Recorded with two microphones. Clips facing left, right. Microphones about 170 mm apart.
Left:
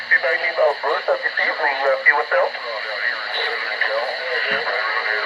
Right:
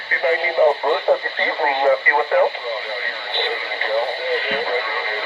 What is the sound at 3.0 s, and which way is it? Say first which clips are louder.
Radio: right 3 dB; 25° right (ahead or behind).